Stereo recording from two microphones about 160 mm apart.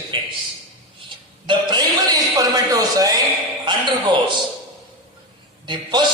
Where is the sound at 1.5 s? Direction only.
25° right (ahead or behind).